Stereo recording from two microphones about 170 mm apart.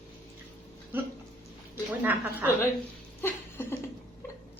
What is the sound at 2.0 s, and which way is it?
Speech, 10° right (ahead or behind).